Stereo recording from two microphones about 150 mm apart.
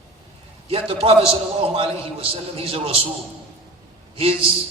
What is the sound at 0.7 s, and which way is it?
A man's voice, 40° right (ahead or behind).